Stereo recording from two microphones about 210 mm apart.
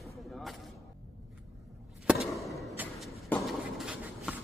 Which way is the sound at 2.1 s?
Centre (ahead or behind).